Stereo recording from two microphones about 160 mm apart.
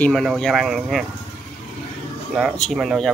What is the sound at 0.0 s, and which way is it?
Speech, 5° left (ahead or behind).